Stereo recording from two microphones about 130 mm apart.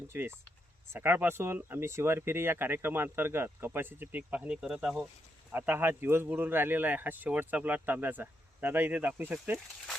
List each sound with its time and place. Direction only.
0.1 s speech: 20° right (ahead or behind)